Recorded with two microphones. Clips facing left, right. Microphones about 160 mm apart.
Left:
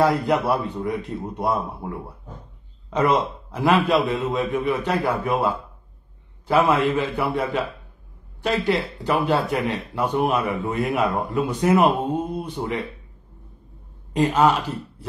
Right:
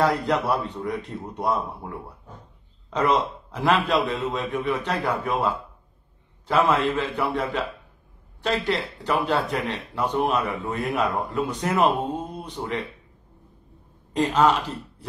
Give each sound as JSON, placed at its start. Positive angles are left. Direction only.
{"t": 0.0, "sound": "a man's voice", "side_deg": 5}
{"t": 14.1, "sound": "speech", "side_deg": 5}